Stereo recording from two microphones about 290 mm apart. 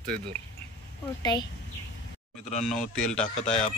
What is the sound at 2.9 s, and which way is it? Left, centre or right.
Speech, centre.